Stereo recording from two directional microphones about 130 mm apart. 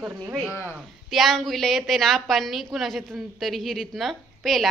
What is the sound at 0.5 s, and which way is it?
Speech, 20° left (ahead or behind).